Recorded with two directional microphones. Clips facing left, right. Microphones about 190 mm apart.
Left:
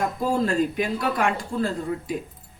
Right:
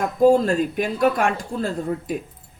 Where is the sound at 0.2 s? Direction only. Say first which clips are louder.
Right 9 dB; 45° right (ahead or behind).